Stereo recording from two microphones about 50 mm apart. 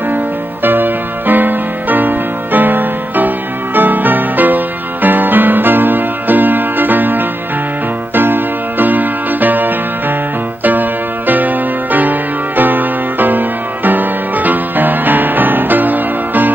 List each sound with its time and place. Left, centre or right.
0.7 s music: right